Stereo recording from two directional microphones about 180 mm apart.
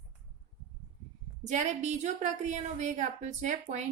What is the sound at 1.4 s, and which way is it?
A woman's voice, 40° right (ahead or behind).